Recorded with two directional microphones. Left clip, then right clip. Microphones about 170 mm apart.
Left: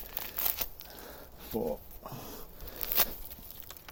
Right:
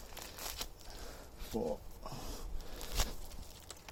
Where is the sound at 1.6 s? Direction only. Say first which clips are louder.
Left 4 dB; 35° left (ahead or behind).